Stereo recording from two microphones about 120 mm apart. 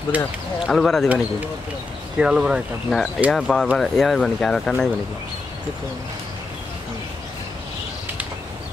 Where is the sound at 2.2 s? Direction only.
5° right (ahead or behind).